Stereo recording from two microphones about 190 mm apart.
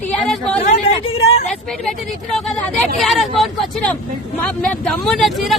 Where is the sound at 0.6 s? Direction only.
35° left (ahead or behind).